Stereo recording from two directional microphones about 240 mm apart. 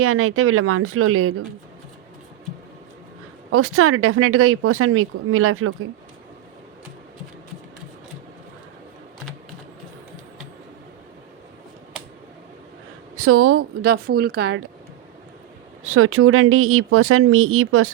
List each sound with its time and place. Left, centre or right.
0.0 s speech: right
3.5 s speech: right
13.1 s speech: right
13.6 s speech: right
15.8 s speech: right